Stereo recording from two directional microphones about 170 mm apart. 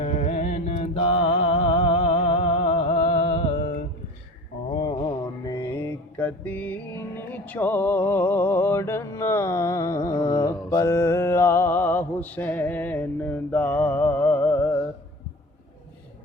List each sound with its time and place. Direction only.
0.0 s music: 45° left (ahead or behind)
4.7 s music: 25° left (ahead or behind); by 14.7 s 10° left (ahead or behind)